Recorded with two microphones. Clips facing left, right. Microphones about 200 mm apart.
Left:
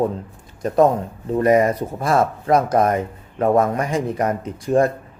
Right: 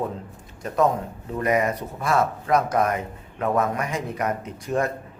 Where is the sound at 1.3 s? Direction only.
30° left (ahead or behind).